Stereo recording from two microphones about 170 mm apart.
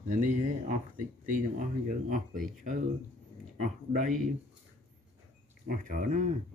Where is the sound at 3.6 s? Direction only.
50° right (ahead or behind).